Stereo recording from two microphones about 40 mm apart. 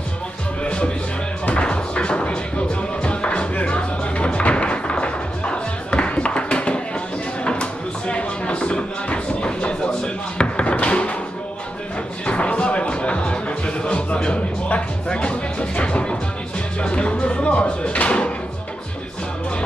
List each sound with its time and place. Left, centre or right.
1.5 s music: left
8.1 s a sound: left
12.3 s music: left